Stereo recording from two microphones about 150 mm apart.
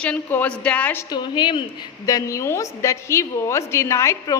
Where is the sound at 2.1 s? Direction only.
20° left (ahead or behind).